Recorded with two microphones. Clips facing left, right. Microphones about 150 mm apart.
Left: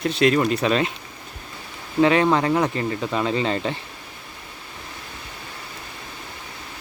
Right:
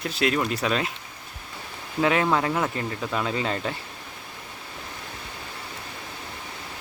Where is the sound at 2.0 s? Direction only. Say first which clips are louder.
Left 5 dB; 5° right (ahead or behind).